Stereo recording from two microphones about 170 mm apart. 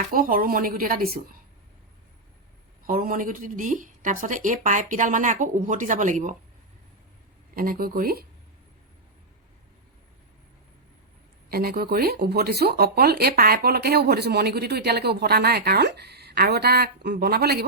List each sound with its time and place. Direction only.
0.1 s a woman's voice: 55° right (ahead or behind)
2.8 s a woman's voice: 55° right (ahead or behind)
7.5 s a woman's voice: 60° right (ahead or behind)
11.4 s speech: 65° right (ahead or behind)